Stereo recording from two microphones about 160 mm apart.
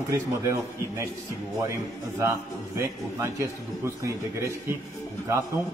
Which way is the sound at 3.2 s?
20° right (ahead or behind).